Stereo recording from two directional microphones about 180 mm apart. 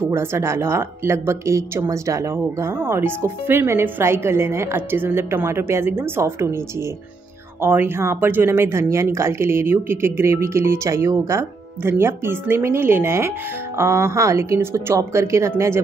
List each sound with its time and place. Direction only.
0.0 s speech: 15° right (ahead or behind)
7.6 s speech: 15° right (ahead or behind)